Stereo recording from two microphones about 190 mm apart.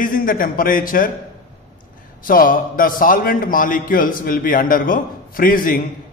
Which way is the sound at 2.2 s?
45° left (ahead or behind).